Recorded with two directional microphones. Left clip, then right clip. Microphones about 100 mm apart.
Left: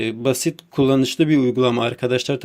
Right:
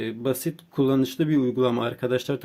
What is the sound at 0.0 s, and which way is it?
Speech, 40° left (ahead or behind).